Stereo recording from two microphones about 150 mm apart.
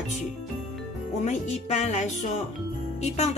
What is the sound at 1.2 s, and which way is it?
Speech, 50° left (ahead or behind).